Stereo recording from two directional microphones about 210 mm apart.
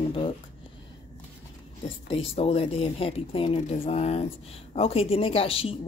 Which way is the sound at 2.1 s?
25° left (ahead or behind).